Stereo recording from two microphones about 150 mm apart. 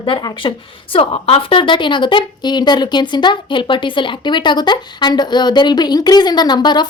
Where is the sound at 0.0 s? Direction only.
30° left (ahead or behind).